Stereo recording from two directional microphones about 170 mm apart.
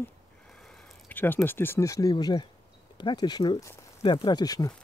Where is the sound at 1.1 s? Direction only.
10° left (ahead or behind).